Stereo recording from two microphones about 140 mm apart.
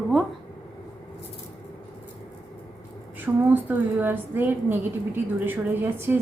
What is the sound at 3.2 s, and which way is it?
A woman's voice, 15° right (ahead or behind).